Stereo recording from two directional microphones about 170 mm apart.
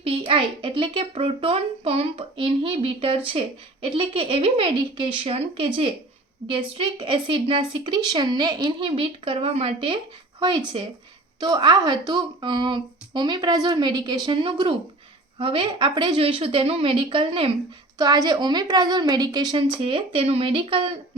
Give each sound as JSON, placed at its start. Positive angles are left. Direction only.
{"t": 0.3, "sound": "a child's voice", "side_deg": -30}
{"t": 11.3, "sound": "a woman's voice", "side_deg": -25}